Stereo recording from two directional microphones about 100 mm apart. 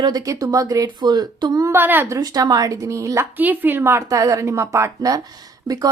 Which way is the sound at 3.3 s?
20° right (ahead or behind).